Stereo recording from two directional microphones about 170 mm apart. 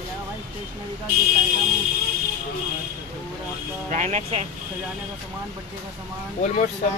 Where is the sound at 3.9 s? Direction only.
45° right (ahead or behind).